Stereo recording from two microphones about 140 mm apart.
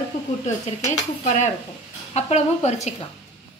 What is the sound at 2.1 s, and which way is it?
Speech, 50° left (ahead or behind).